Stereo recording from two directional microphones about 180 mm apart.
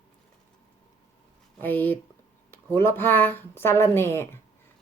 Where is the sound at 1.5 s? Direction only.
10° left (ahead or behind).